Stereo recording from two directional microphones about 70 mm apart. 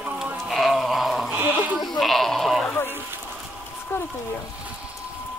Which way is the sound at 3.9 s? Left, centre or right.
Left.